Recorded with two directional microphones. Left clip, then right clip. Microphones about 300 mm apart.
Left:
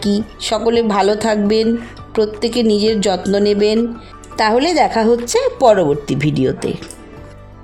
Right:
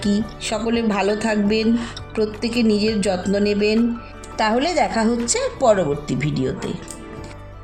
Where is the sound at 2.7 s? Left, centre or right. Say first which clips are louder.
Left 5 dB; left.